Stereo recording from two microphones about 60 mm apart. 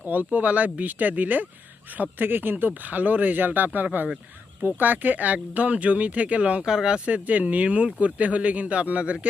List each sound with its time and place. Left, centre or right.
0.0 s speech: right